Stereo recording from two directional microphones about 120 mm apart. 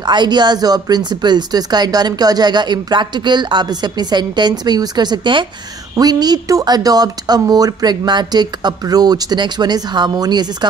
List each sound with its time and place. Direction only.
0.0 s speech: 40° right (ahead or behind)